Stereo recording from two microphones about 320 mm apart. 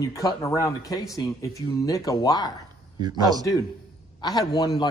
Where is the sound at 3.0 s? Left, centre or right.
Centre.